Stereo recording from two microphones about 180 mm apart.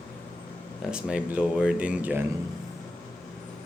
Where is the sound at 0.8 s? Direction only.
5° right (ahead or behind).